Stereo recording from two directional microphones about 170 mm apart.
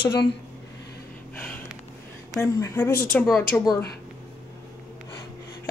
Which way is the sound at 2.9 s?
65° left (ahead or behind).